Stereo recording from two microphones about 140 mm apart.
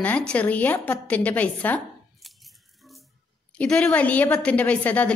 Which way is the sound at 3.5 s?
10° left (ahead or behind).